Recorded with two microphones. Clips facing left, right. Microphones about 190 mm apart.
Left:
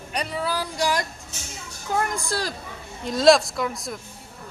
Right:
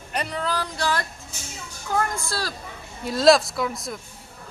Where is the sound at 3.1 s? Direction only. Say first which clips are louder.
Even; centre (ahead or behind).